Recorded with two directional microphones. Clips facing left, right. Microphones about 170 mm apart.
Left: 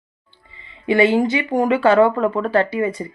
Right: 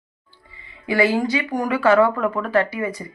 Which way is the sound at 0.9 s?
25° left (ahead or behind).